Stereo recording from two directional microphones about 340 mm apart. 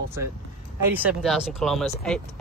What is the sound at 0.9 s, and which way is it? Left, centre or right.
Speech, centre.